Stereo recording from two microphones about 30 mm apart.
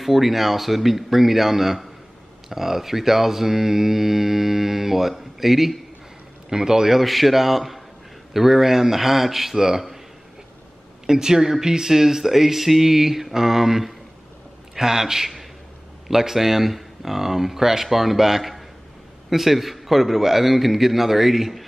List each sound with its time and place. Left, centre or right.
0.0 s speech: centre
6.5 s a man's voice: centre
7.0 s a man's voice: centre
9.6 s speech: centre
11.1 s a man's voice: right